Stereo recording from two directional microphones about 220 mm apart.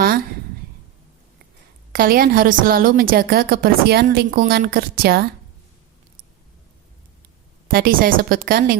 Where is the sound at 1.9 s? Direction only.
40° right (ahead or behind).